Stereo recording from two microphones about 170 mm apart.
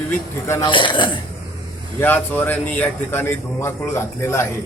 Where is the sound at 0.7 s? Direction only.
30° left (ahead or behind).